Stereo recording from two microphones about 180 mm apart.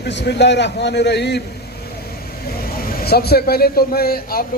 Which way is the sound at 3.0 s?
60° left (ahead or behind).